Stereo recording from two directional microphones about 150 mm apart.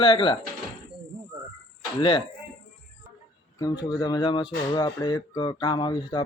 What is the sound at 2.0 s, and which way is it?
Speech, 30° left (ahead or behind).